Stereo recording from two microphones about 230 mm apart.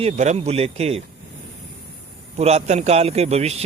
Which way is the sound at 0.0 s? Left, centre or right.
Right.